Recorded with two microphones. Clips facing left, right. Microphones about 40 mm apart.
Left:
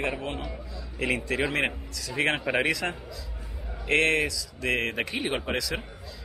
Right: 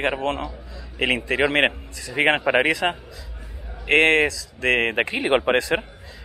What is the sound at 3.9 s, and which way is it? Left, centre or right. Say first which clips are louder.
A man's voice: right 7 dB; right.